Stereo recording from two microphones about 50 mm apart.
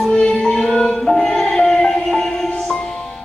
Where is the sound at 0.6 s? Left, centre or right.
Centre.